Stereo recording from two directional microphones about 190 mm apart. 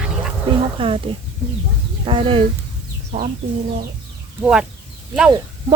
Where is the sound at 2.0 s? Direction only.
30° right (ahead or behind).